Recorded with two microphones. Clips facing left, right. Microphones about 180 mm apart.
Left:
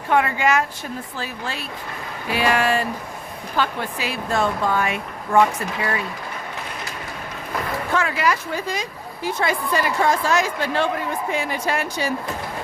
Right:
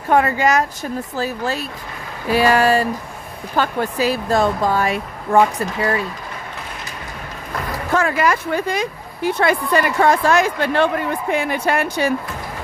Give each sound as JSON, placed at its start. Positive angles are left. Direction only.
{"t": 0.1, "sound": "speech", "side_deg": -40}
{"t": 7.9, "sound": "speech", "side_deg": -45}